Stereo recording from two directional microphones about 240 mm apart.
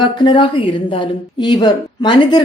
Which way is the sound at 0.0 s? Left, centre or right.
Centre.